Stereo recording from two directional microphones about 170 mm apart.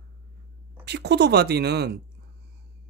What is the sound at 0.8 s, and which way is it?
Speech, 80° right.